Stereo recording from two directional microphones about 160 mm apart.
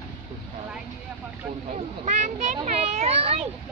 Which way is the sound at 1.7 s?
45° right (ahead or behind).